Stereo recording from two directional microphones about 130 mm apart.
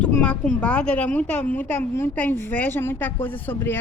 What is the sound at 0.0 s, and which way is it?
Speech, 10° left (ahead or behind).